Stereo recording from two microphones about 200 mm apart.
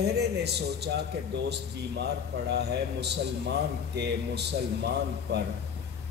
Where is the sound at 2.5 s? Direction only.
55° right (ahead or behind).